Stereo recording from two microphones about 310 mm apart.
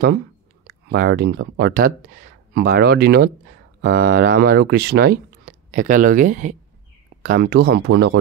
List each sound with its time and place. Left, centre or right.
0.7 s speech: right